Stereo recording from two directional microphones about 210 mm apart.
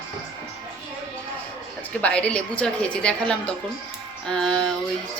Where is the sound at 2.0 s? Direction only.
5° left (ahead or behind).